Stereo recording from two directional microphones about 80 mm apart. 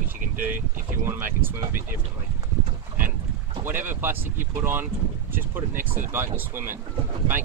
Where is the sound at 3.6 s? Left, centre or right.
Right.